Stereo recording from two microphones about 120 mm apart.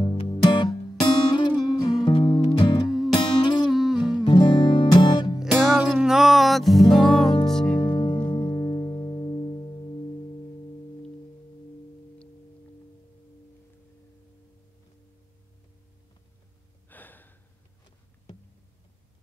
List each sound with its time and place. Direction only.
0.0 s music: 50° left (ahead or behind)
3.7 s music: 5° right (ahead or behind)
4.2 s music: 40° left (ahead or behind)
5.4 s music: centre (ahead or behind)
7.8 s music: 40° left (ahead or behind)
16.9 s gasp: 15° left (ahead or behind)